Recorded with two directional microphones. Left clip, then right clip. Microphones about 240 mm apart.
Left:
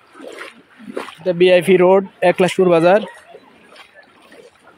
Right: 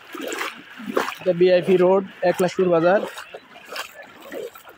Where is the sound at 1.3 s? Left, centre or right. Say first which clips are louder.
Left 5 dB; left.